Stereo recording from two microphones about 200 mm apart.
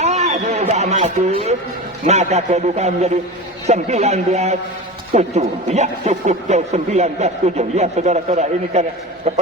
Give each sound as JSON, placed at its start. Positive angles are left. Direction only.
{"t": 0.0, "sound": "a man's voice", "side_deg": -35}